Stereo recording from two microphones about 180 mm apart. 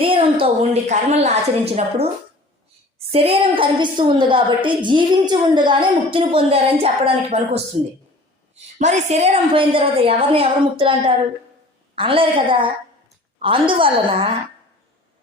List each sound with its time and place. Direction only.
0.0 s a woman's voice: 30° right (ahead or behind)
3.1 s a woman's voice: 30° right (ahead or behind)
8.8 s a woman's voice: 40° right (ahead or behind)